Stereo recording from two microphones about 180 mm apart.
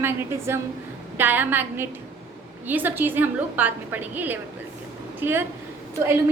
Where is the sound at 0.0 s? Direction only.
15° right (ahead or behind).